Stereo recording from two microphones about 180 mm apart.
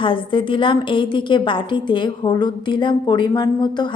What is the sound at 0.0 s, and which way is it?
A woman's voice, 30° left (ahead or behind).